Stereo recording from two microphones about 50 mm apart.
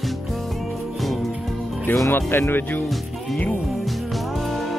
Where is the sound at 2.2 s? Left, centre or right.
Left.